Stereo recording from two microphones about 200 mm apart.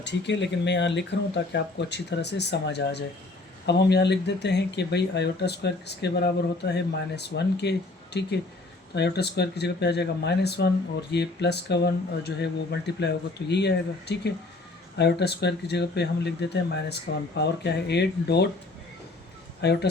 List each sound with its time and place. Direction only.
0.0 s speech: 60° left (ahead or behind)
19.6 s speech: 55° left (ahead or behind)